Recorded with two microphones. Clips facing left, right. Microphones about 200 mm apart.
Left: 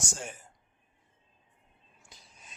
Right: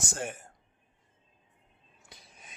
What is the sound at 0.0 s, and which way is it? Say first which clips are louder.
Speech: right 4 dB; 60° right (ahead or behind).